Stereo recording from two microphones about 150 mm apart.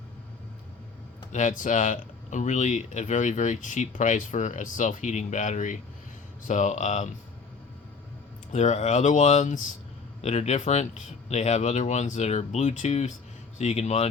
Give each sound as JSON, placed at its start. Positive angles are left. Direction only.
{"t": 1.3, "sound": "speech", "side_deg": 55}
{"t": 8.5, "sound": "speech", "side_deg": 50}